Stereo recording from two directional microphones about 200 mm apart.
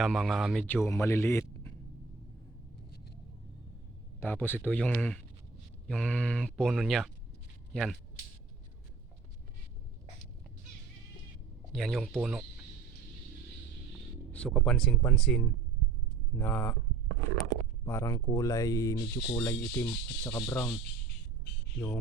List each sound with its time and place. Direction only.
0.0 s a man's voice: centre (ahead or behind)
4.2 s speech: 10° left (ahead or behind)
11.7 s speech: centre (ahead or behind)
14.3 s speech: 5° left (ahead or behind)